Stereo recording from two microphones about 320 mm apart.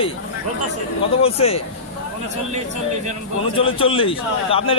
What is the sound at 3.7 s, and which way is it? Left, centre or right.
Speech, centre.